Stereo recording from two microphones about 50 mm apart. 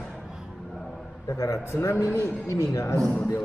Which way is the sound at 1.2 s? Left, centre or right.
Left.